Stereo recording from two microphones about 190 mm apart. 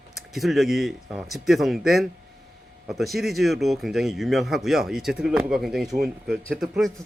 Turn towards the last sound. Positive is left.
turn(degrees=0)  # may be behind; listen again after turning